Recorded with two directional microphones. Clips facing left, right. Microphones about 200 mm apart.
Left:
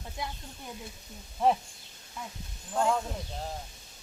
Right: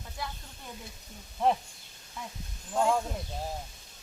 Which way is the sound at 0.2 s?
20° left (ahead or behind).